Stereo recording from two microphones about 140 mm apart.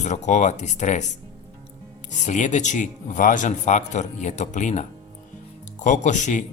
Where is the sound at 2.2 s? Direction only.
60° left (ahead or behind).